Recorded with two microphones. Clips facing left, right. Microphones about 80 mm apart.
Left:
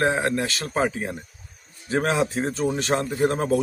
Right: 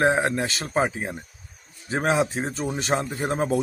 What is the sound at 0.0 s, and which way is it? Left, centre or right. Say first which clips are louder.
A man's voice: right 1 dB; right.